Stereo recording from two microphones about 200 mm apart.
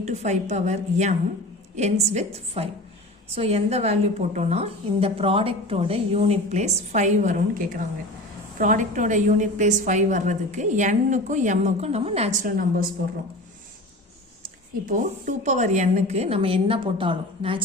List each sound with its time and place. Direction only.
0.0 s a woman's voice: 35° right (ahead or behind)
14.4 s a woman's voice: 40° right (ahead or behind); by 17.6 s 25° right (ahead or behind)